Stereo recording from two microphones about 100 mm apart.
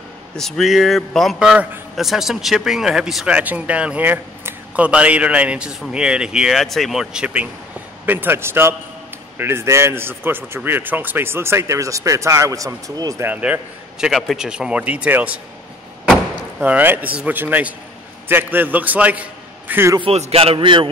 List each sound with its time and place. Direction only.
0.4 s a man's voice: centre (ahead or behind); by 13.1 s 35° right (ahead or behind)
13.2 s a man's voice: 15° right (ahead or behind)
16.5 s a man's voice: 15° right (ahead or behind)
20.0 s a man's voice: 90° right
20.5 s a man's voice: 55° right (ahead or behind)